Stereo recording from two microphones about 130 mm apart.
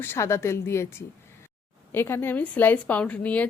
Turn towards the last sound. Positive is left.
turn(degrees=10)  # may be behind; listen again after turning